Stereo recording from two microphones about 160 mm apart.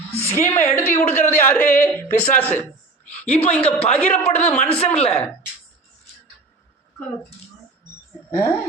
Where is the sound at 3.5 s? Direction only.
10° left (ahead or behind).